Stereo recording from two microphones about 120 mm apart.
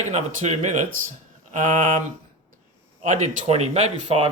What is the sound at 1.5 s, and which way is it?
Speech, 90° right.